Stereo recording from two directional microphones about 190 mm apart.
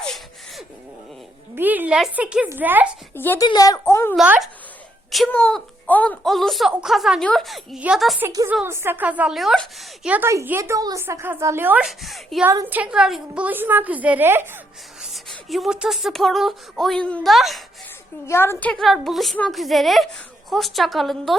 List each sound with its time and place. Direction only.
0.0 s a sound: centre (ahead or behind)
1.5 s a woman's voice: 10° right (ahead or behind)
3.2 s a woman's voice: 10° left (ahead or behind)
4.1 s speech: 5° right (ahead or behind)
8.3 s a woman's voice: 15° right (ahead or behind); by 12.5 s centre (ahead or behind)
12.5 s a woman's voice: 10° right (ahead or behind)
15.0 s speech: centre (ahead or behind)
18.3 s speech: 10° left (ahead or behind)